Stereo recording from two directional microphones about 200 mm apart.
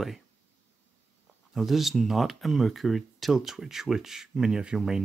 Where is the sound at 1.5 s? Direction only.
Centre (ahead or behind).